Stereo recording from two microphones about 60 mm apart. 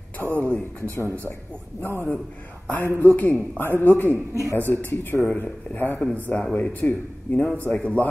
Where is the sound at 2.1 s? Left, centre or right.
Left.